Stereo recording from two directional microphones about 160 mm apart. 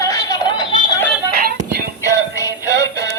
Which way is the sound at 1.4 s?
75° right (ahead or behind).